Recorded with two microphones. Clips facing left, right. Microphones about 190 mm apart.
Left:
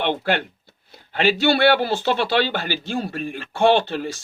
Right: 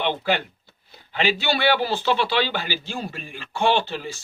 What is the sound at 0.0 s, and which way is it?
A man's voice, 55° left (ahead or behind).